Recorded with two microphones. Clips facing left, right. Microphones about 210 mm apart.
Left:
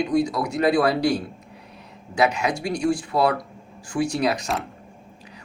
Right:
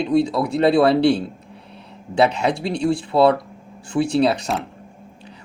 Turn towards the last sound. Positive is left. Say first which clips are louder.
# right 5 dB
turn(degrees=-30)  # may be behind; listen again after turning